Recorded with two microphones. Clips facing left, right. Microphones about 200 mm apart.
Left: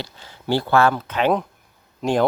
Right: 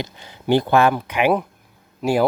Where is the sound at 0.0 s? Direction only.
15° right (ahead or behind).